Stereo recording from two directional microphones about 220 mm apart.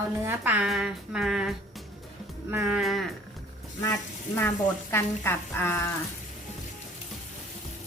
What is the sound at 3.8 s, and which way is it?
Speech, 10° left (ahead or behind).